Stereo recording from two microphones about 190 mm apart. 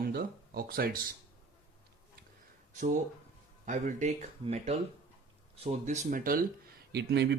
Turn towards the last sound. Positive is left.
turn(degrees=-60)  # may be behind; listen again after turning